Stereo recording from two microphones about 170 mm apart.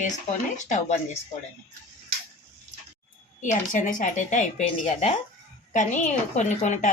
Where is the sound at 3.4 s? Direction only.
50° left (ahead or behind).